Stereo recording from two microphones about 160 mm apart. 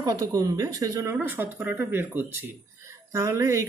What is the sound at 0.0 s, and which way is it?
Speech, 25° right (ahead or behind).